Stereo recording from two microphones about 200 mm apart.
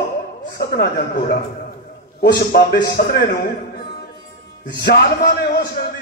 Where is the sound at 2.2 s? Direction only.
55° left (ahead or behind).